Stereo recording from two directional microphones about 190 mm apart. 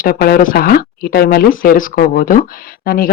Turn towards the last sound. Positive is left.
turn(degrees=50)  # may be behind; listen again after turning